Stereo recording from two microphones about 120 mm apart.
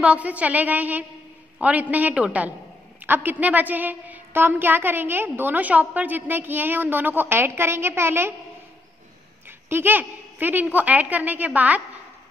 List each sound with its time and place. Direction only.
0.0 s a woman's voice: 10° right (ahead or behind)
9.7 s a woman's voice: 15° right (ahead or behind)